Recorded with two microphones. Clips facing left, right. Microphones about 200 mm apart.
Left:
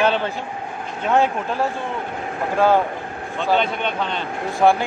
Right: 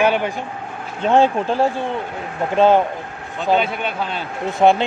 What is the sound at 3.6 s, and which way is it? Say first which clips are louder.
Speech: even; 5° right (ahead or behind).